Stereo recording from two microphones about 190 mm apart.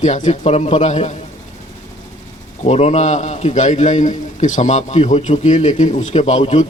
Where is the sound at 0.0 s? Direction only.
40° left (ahead or behind).